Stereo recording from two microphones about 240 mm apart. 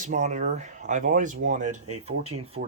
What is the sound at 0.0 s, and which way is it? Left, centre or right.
Speech, right.